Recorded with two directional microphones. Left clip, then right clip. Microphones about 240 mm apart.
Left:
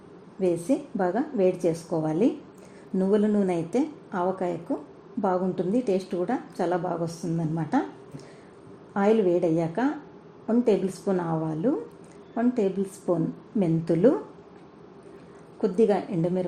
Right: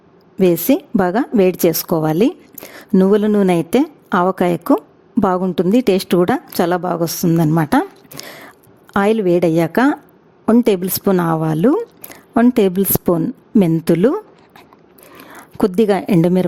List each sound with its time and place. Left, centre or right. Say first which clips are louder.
0.3 s a woman's voice: right 11 dB; right
15.6 s a woman's voice: right 8 dB; right